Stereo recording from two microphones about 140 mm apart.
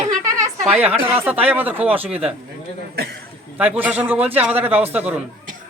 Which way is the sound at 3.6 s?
10° right (ahead or behind).